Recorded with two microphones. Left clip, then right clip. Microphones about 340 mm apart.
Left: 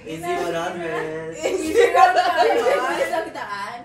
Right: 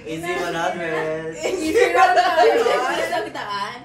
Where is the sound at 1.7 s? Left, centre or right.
Right.